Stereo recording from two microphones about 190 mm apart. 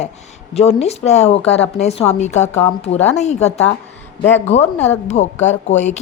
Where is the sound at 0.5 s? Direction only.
35° left (ahead or behind).